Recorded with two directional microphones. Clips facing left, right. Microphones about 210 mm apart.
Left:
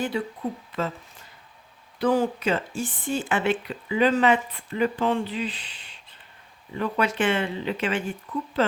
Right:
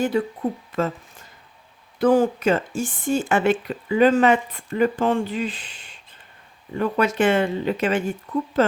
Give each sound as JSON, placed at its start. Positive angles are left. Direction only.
{"t": 0.1, "sound": "speech", "side_deg": -45}
{"t": 2.0, "sound": "speech", "side_deg": -50}